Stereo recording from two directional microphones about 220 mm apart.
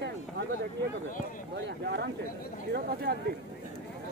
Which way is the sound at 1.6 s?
50° right (ahead or behind).